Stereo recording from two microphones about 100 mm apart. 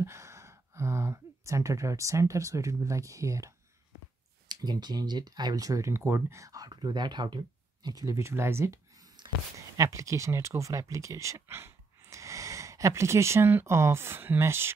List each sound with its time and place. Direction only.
0.0 s speech: 30° right (ahead or behind)
4.5 s speech: 45° right (ahead or behind); by 8.7 s 25° right (ahead or behind)
9.2 s a sound: 50° right (ahead or behind)
9.8 s speech: 30° right (ahead or behind)